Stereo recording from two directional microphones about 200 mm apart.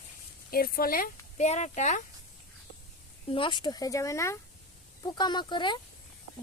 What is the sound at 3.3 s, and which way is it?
Speech, 25° left (ahead or behind).